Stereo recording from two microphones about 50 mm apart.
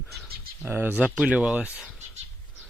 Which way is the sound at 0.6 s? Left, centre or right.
Right.